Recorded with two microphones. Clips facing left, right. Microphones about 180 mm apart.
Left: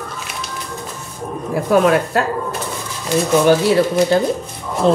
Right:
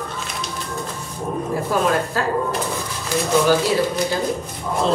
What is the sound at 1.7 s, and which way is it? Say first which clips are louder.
Speech: left 8 dB; 65° left (ahead or behind).